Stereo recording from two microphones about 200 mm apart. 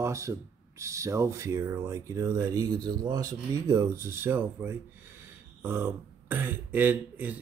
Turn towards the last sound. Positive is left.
turn(degrees=-10)  # may be behind; listen again after turning